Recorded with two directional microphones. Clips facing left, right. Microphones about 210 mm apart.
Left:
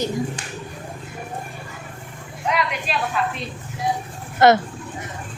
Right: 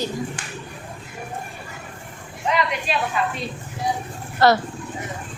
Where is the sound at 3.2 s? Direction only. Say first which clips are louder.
Left 2 dB; centre (ahead or behind).